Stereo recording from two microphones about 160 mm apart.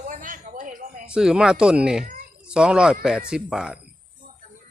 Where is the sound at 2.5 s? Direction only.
5° right (ahead or behind).